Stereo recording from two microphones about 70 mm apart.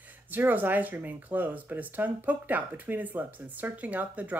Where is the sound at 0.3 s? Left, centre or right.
Right.